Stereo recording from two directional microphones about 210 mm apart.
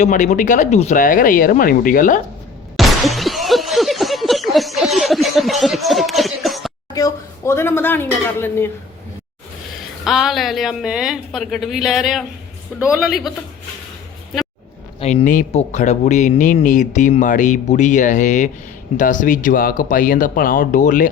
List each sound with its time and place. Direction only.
0.0 s speech: 35° left (ahead or behind)
2.7 s a sound: centre (ahead or behind)
6.9 s speech: 15° left (ahead or behind)
10.0 s a woman's voice: centre (ahead or behind)
15.0 s speech: 35° left (ahead or behind)